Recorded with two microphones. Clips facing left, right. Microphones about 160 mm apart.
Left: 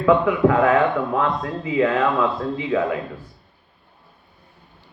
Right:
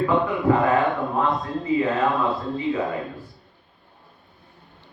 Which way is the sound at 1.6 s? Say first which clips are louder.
Left 2 dB; 90° left.